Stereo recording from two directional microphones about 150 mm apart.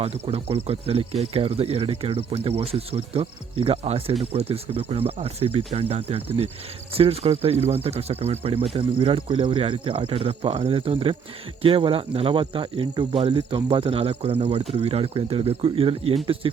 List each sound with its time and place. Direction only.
0.0 s speech: 40° right (ahead or behind)